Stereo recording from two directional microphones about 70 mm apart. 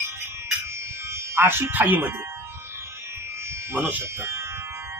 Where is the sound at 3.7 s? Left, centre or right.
Right.